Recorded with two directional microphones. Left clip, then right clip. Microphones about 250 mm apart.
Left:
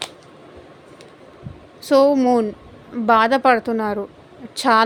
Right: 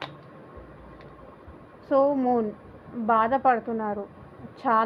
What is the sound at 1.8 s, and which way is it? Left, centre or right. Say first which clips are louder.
A woman's voice: left 8 dB; left.